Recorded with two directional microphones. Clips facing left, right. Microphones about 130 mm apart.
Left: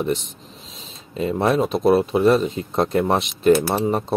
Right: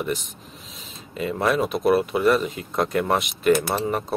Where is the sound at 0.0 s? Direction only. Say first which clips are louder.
Left 4 dB; 25° left (ahead or behind).